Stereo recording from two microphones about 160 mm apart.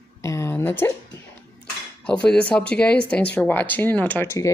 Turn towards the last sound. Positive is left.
turn(degrees=15)  # may be behind; listen again after turning